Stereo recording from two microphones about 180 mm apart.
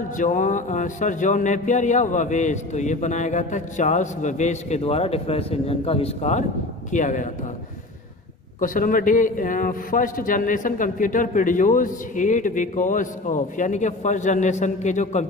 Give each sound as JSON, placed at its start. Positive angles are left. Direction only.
{"t": 0.2, "sound": "a man's voice", "side_deg": 45}
{"t": 8.5, "sound": "a man's voice", "side_deg": 50}